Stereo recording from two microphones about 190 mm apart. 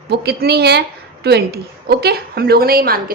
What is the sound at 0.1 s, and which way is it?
A woman's voice, 60° right (ahead or behind).